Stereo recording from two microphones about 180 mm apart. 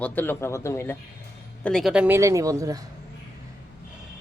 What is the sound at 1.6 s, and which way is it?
Speech, centre (ahead or behind).